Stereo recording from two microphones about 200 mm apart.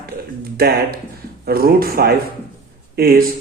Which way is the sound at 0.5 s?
50° right (ahead or behind).